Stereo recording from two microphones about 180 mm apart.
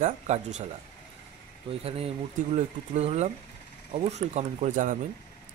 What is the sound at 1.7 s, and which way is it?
Speech, 35° right (ahead or behind).